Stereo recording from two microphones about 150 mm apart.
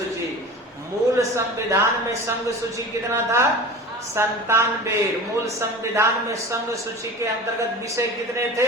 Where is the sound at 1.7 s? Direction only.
20° right (ahead or behind).